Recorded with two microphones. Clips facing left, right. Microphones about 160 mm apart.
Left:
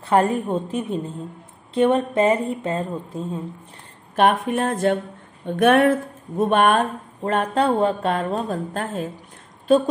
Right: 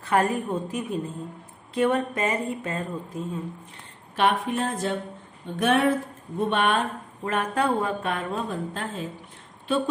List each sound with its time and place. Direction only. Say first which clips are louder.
0.0 s a woman's voice: left 4 dB; 30° left (ahead or behind)
4.2 s a woman's voice: left 5 dB; 50° left (ahead or behind)
5.6 s a sound: left 6 dB; 55° left (ahead or behind)
7.2 s a woman's voice: left 5 dB; 35° left (ahead or behind); by 9.1 s 50° left (ahead or behind)